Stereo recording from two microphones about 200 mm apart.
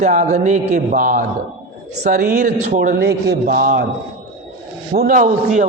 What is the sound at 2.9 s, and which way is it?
Speech, 55° right (ahead or behind).